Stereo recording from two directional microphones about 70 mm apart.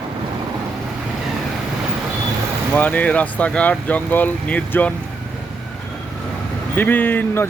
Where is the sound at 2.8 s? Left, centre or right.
Left.